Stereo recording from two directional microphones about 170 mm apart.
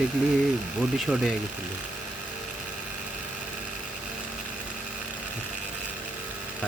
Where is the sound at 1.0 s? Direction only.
Centre (ahead or behind).